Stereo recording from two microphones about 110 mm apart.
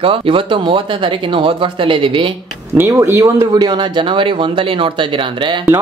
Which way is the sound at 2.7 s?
25° right (ahead or behind).